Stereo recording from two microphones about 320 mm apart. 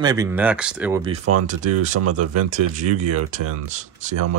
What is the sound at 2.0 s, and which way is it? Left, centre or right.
Speech, right.